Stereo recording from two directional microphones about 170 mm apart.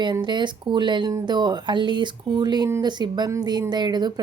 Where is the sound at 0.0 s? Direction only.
25° right (ahead or behind).